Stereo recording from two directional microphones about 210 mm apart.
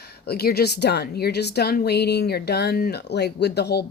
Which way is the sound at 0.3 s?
50° left (ahead or behind).